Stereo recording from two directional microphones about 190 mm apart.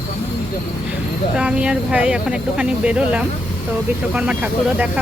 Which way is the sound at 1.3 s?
5° right (ahead or behind).